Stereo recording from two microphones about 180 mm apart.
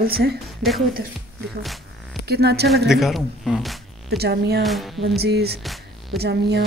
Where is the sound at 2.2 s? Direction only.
65° right (ahead or behind).